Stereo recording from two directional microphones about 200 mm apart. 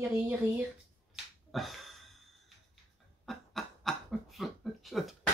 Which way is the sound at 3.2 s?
Centre (ahead or behind).